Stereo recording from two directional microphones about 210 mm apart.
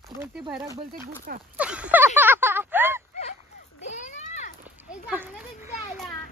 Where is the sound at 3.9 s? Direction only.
35° left (ahead or behind).